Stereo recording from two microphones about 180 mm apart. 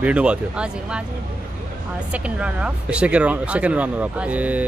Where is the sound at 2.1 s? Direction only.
5° right (ahead or behind).